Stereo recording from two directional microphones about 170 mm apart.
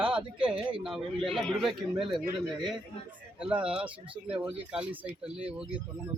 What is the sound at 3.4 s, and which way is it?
A man's voice, 5° right (ahead or behind).